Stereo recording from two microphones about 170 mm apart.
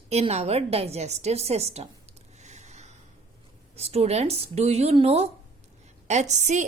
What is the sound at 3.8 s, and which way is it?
A woman's voice, 35° right (ahead or behind).